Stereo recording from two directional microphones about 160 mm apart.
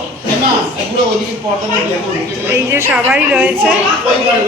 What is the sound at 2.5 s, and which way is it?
A child's voice, 15° right (ahead or behind).